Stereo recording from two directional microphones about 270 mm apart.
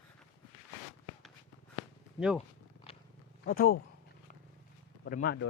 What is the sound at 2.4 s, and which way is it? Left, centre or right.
Purr, left.